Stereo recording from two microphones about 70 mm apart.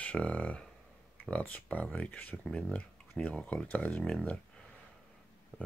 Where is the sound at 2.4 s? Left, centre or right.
Centre.